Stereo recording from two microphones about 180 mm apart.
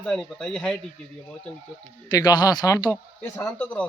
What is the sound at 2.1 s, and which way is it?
Speech, 20° left (ahead or behind).